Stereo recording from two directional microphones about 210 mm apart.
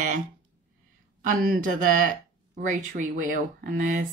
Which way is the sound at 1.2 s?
40° right (ahead or behind).